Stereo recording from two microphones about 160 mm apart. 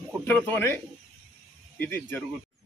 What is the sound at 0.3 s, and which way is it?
Speech, 10° left (ahead or behind).